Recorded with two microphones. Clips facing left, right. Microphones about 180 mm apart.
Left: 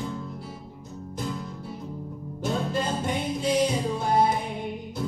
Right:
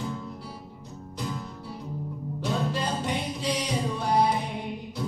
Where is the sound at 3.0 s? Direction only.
50° left (ahead or behind).